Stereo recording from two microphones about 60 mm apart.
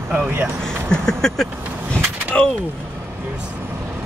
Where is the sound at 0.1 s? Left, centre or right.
Right.